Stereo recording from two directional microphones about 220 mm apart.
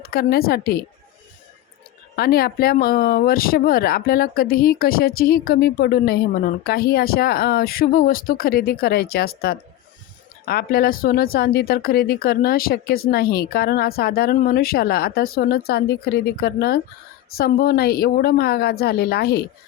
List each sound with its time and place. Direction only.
0.0 s speech: 45° left (ahead or behind)
2.1 s speech: 45° left (ahead or behind)